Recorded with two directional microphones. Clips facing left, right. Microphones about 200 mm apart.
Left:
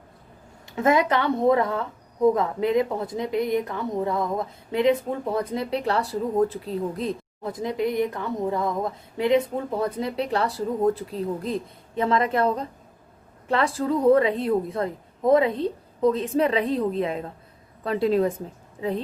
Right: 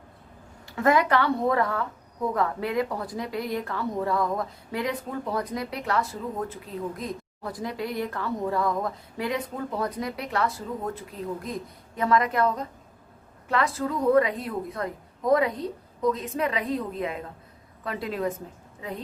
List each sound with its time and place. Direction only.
0.6 s speech: 20° left (ahead or behind)